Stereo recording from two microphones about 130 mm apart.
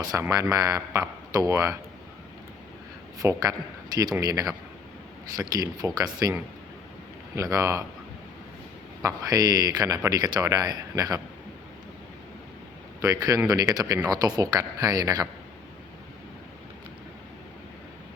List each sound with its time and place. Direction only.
0.0 s speech: 30° right (ahead or behind)
3.2 s speech: 25° right (ahead or behind)
7.3 s speech: 25° right (ahead or behind)
9.0 s speech: 25° right (ahead or behind)
13.0 s speech: 25° right (ahead or behind)